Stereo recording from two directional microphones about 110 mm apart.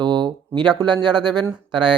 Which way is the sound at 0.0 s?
45° right (ahead or behind).